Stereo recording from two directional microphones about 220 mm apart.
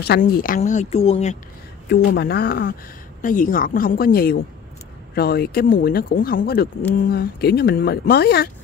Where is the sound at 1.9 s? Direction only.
50° left (ahead or behind).